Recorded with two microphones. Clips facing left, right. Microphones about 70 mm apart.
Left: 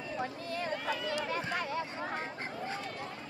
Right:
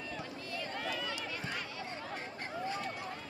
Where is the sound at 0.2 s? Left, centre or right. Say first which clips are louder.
Left 5 dB; left.